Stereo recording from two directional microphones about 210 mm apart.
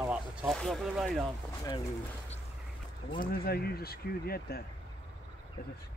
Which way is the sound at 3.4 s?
45° left (ahead or behind).